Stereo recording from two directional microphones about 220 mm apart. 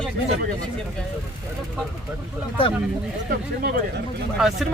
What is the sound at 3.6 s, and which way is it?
Speech, 45° right (ahead or behind).